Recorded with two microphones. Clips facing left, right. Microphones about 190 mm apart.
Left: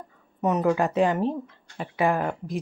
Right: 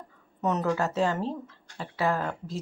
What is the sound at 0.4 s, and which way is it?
Speech, 10° left (ahead or behind).